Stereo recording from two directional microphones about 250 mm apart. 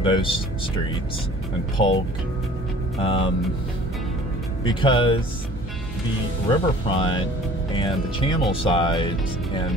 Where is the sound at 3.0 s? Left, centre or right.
Left.